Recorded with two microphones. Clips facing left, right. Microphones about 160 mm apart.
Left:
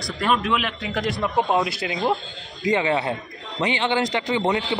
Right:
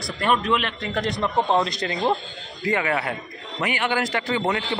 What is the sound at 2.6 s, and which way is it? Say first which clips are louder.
A man's voice: left 2 dB; 20° left (ahead or behind).